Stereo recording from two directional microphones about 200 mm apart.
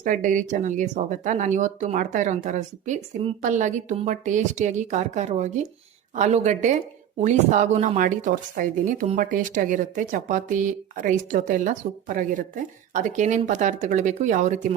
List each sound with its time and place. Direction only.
0.0 s a woman's voice: 40° right (ahead or behind)